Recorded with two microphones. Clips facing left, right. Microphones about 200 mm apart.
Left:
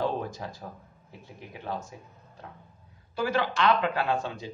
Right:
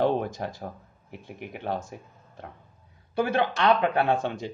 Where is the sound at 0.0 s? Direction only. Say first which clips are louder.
Right 5 dB; 65° right (ahead or behind).